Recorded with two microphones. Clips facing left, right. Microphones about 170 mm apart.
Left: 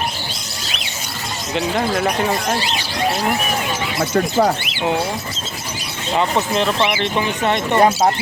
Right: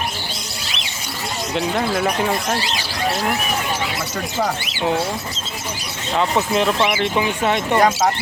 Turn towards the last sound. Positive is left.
turn(degrees=-10)  # may be behind; listen again after turning